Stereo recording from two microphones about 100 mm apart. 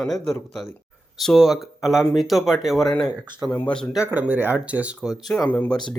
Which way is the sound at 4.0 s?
15° right (ahead or behind).